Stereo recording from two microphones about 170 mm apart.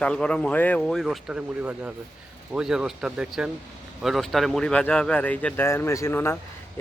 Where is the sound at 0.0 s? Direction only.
5° left (ahead or behind).